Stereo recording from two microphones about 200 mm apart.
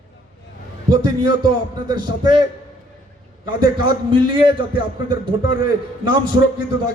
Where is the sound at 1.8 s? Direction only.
20° right (ahead or behind).